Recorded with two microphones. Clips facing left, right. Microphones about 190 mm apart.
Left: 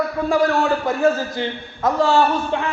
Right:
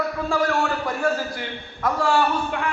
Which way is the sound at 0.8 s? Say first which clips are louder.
Left 5 dB; 25° left (ahead or behind).